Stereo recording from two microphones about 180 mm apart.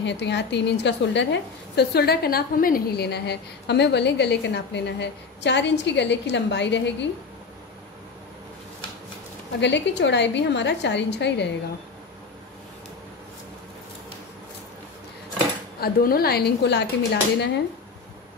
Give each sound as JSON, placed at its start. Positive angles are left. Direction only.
{"t": 0.0, "sound": "a woman's voice", "side_deg": 75}
{"t": 9.6, "sound": "a woman's voice", "side_deg": 75}
{"t": 15.8, "sound": "speech", "side_deg": 55}